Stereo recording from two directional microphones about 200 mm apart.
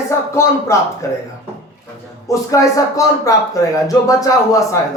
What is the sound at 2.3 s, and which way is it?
Speech, 15° left (ahead or behind).